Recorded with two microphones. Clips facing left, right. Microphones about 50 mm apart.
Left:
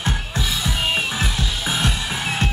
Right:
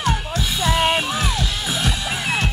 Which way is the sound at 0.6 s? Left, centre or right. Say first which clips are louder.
Right 7 dB; right.